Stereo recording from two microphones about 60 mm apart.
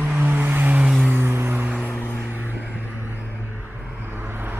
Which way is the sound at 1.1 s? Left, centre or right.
Right.